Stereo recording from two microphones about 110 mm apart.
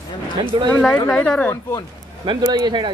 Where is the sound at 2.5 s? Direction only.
45° right (ahead or behind).